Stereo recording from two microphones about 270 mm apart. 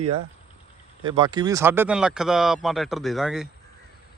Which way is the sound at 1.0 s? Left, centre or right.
Centre.